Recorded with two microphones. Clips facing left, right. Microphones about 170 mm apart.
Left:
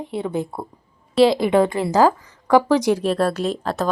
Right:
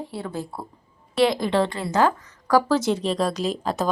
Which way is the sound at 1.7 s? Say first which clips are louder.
Left 5 dB; 30° left (ahead or behind).